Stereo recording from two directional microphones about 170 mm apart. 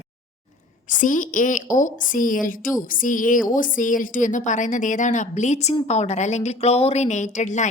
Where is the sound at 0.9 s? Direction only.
50° left (ahead or behind).